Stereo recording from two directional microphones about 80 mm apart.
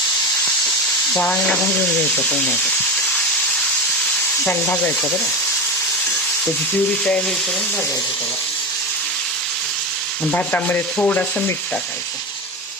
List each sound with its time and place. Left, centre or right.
1.1 s frying: centre
1.6 s sanding: left
2.2 s frying: centre
4.4 s sanding: left
5.0 s frying: centre
7.0 s frying: centre
10.3 s sanding: left